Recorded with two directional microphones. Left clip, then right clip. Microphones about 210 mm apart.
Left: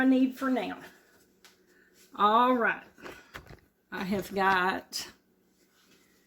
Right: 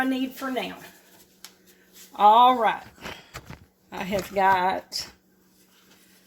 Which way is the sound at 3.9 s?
15° left (ahead or behind).